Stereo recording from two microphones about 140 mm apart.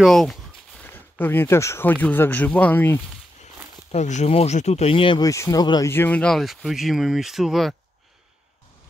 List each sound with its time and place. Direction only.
0.0 s a sound: centre (ahead or behind)
0.8 s speech: 15° left (ahead or behind)
3.9 s speech: 55° left (ahead or behind); by 5.2 s 40° left (ahead or behind)
5.2 s speech: 25° left (ahead or behind)
5.9 s speech: 15° left (ahead or behind); by 7.7 s centre (ahead or behind)